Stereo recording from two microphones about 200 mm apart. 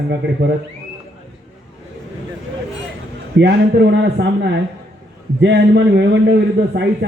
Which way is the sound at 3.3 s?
60° right (ahead or behind).